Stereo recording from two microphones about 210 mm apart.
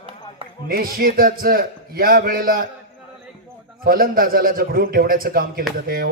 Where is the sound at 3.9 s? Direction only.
45° right (ahead or behind).